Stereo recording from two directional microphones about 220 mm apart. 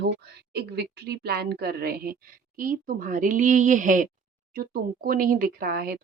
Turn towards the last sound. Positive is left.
turn(degrees=-40)  # may be behind; listen again after turning